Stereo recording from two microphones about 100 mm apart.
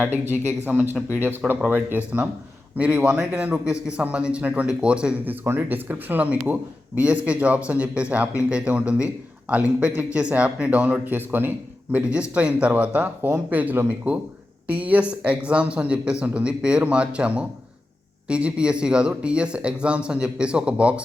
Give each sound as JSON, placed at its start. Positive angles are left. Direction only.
{"t": 0.0, "sound": "speech", "side_deg": -20}